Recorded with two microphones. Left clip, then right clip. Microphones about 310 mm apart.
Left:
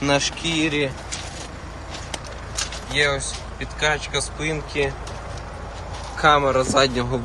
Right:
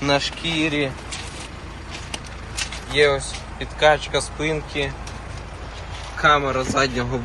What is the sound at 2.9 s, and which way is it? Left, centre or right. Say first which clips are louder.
Speech: right 3 dB; centre.